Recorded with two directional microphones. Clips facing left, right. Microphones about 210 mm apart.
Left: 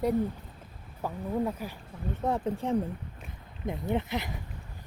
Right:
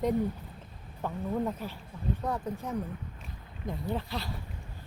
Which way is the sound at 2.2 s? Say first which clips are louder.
Left 8 dB; 25° left (ahead or behind).